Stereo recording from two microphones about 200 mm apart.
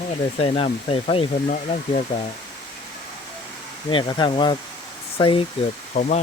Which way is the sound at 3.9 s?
25° left (ahead or behind).